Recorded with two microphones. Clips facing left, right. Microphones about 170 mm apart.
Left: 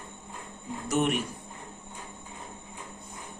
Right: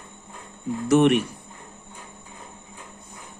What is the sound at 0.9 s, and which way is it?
Speech, 70° right (ahead or behind).